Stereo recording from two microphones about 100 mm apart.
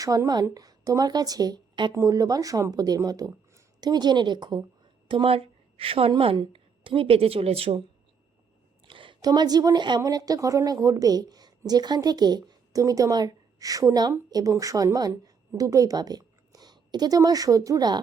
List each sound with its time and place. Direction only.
0.0 s a woman's voice: 35° right (ahead or behind)
2.0 s a woman's voice: 35° right (ahead or behind)
5.0 s a woman's voice: 60° right (ahead or behind); by 7.8 s 80° right
8.9 s a sound: 60° right (ahead or behind)
9.2 s a woman's voice: 45° right (ahead or behind)